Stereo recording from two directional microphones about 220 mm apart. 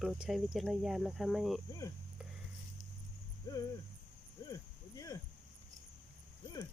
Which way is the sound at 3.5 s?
15° left (ahead or behind).